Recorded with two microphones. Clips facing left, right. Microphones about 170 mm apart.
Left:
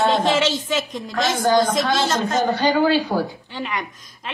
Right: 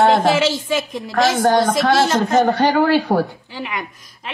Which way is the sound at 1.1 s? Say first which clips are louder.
Right 4 dB; 55° right (ahead or behind).